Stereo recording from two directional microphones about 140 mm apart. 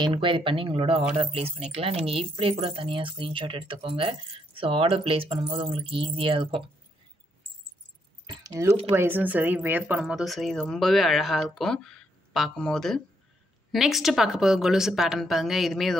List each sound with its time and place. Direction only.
0.0 s speech: 35° right (ahead or behind)
8.3 s keys jangling: 25° right (ahead or behind)
8.9 s speech: 15° right (ahead or behind)